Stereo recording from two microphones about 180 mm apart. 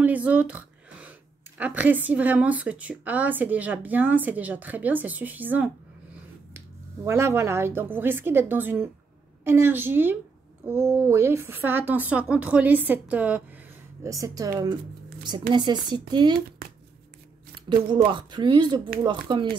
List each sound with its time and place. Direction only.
0.0 s a sound: 10° right (ahead or behind)
1.6 s a woman's voice: 10° right (ahead or behind)
7.1 s a woman's voice: 15° right (ahead or behind)
17.6 s speech: 25° right (ahead or behind)